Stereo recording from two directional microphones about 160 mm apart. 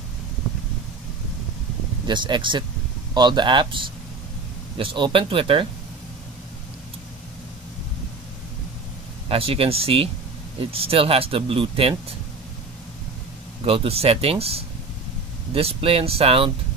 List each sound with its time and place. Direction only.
2.0 s speech: 30° right (ahead or behind)
9.3 s speech: 35° right (ahead or behind)
13.7 s speech: 35° right (ahead or behind)